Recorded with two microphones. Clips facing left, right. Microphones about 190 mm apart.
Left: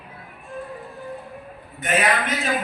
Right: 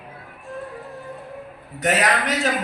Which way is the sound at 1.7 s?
80° right.